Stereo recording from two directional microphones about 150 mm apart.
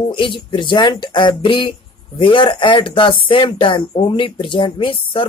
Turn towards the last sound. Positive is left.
turn(degrees=35)  # may be behind; listen again after turning